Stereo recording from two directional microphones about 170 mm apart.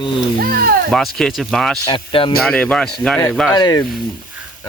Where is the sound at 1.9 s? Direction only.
30° left (ahead or behind).